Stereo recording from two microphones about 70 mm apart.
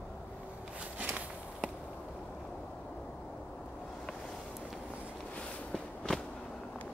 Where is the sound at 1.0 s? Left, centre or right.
Centre.